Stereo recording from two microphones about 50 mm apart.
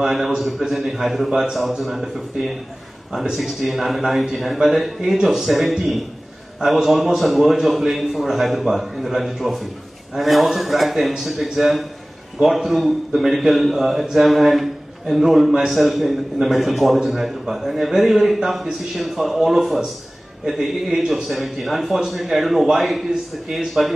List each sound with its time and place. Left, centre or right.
0.0 s a man's voice: centre